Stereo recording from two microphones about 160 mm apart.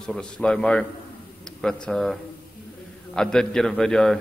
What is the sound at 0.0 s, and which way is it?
A man's voice, 5° left (ahead or behind).